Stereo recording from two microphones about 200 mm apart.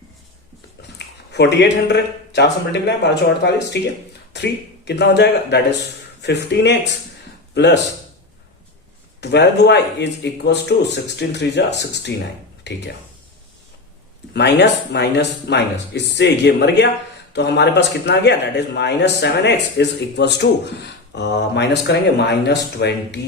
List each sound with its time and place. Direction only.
0.8 s speech: 60° left (ahead or behind)
4.3 s a sound: 60° left (ahead or behind)
4.9 s a man's voice: 60° left (ahead or behind)
9.2 s a man's voice: 60° left (ahead or behind)
14.3 s a man's voice: 60° left (ahead or behind)